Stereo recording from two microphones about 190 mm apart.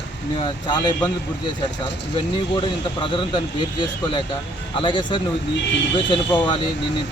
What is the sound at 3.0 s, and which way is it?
Speech, 25° left (ahead or behind).